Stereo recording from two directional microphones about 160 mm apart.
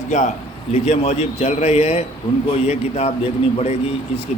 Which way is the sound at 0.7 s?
40° left (ahead or behind).